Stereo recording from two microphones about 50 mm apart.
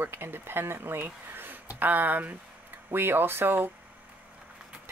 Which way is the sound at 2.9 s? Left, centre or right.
Right.